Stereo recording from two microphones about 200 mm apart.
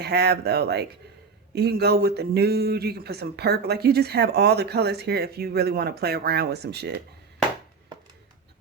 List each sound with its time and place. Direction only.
0.0 s speech: 55° right (ahead or behind)